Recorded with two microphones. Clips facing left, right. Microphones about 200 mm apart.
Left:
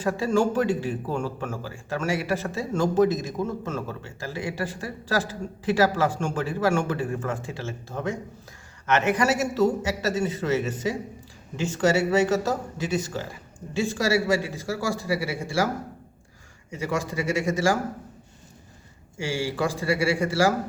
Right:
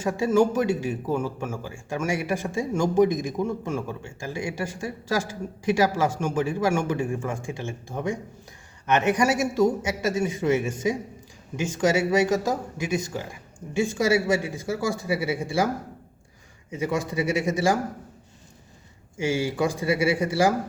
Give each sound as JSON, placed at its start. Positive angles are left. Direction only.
{"t": 0.0, "sound": "a man's voice", "side_deg": -10}
{"t": 16.7, "sound": "speech", "side_deg": -20}
{"t": 19.1, "sound": "a man's voice", "side_deg": -20}